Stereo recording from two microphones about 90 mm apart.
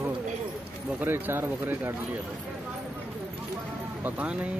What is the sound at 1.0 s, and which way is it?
Speech, 25° right (ahead or behind).